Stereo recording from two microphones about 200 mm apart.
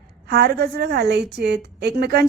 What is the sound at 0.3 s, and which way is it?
A woman's voice, 50° right (ahead or behind).